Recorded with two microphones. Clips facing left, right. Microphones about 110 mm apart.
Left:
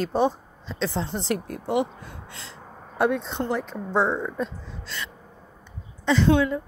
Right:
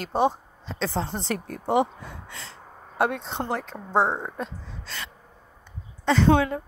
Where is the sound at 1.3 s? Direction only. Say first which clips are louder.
Left 2 dB; 5° left (ahead or behind).